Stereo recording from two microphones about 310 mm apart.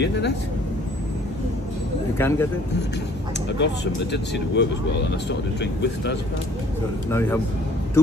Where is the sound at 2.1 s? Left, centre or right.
Centre.